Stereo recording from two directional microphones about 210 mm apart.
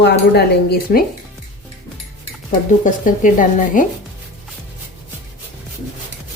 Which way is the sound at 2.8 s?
40° left (ahead or behind).